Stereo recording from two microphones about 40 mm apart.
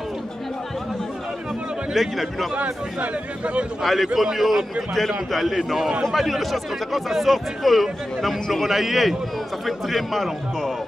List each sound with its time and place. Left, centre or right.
2.0 s speech: centre
2.5 s speech: right
3.8 s a man's voice: centre